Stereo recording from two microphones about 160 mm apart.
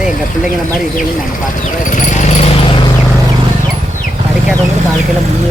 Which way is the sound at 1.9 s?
50° left (ahead or behind).